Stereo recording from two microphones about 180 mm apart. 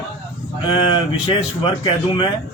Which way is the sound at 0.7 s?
25° left (ahead or behind).